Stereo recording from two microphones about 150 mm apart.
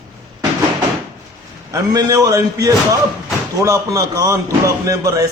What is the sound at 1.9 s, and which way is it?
Speech, 25° right (ahead or behind).